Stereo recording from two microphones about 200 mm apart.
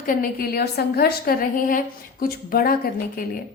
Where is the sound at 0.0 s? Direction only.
45° left (ahead or behind).